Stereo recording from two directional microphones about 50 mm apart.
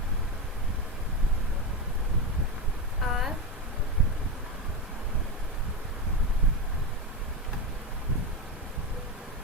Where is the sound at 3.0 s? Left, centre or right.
Centre.